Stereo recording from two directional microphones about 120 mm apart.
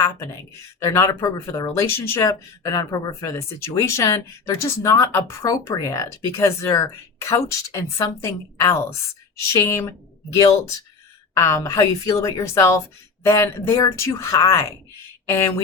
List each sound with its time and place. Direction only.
0.8 s speech: 25° left (ahead or behind)